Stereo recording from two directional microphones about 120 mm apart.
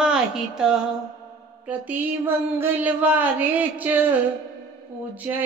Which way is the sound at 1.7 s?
15° right (ahead or behind).